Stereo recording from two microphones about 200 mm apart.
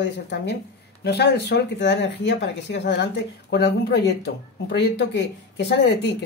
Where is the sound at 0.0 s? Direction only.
60° left (ahead or behind).